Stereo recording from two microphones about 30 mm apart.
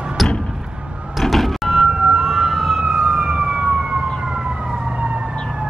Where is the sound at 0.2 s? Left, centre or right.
Centre.